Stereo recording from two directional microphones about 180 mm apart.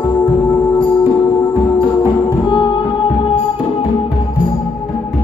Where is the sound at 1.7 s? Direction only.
30° left (ahead or behind).